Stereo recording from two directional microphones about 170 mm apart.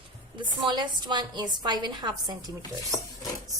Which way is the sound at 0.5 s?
25° right (ahead or behind).